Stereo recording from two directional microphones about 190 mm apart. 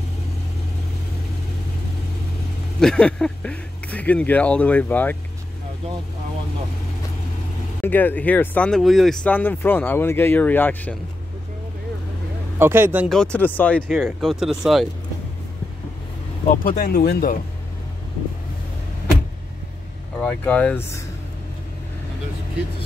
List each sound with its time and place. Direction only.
2.8 s speech: 5° left (ahead or behind)
7.8 s speech: 10° left (ahead or behind)
12.5 s speech: 10° right (ahead or behind)
13.1 s speech: 5° left (ahead or behind)
16.5 s speech: 50° left (ahead or behind)
20.2 s speech: 10° left (ahead or behind)